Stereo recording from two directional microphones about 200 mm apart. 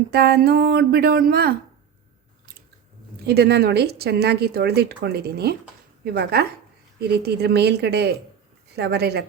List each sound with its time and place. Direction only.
0.1 s speech: 55° right (ahead or behind)
3.2 s a woman's voice: 55° right (ahead or behind)